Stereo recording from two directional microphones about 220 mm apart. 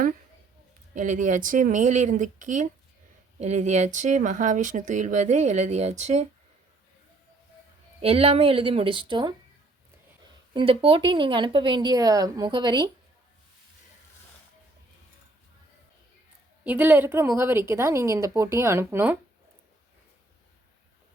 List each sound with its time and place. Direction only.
0.9 s speech: 35° right (ahead or behind)
8.0 s speech: 25° right (ahead or behind)
10.5 s speech: 25° right (ahead or behind)
16.6 s a woman's voice: 10° right (ahead or behind)